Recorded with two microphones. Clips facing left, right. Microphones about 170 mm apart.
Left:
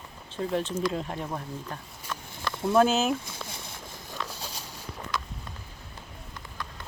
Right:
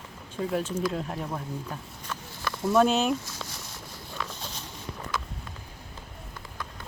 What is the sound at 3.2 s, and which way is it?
Boat, 55° left (ahead or behind).